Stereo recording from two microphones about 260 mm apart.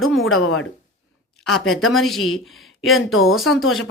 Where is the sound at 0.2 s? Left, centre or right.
Left.